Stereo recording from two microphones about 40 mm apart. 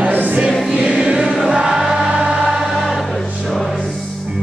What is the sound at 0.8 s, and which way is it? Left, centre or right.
Choir, right.